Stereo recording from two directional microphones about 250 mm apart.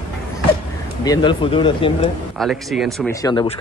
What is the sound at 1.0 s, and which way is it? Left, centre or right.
Speech, centre.